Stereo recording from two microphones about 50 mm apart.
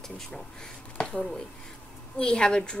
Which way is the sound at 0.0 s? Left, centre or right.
Centre.